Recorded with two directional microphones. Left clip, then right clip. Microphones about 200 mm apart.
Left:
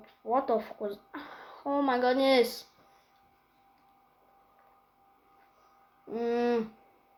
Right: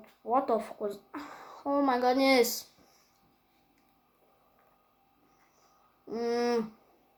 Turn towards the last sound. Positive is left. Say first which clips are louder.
# left 1 dB
turn(degrees=0)  # may be behind; listen again after turning